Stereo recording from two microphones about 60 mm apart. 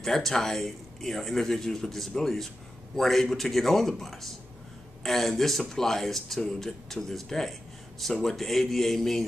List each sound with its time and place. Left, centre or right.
0.0 s speech: centre